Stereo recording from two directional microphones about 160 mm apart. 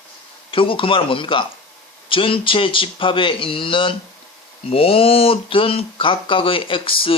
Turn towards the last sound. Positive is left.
turn(degrees=35)  # may be behind; listen again after turning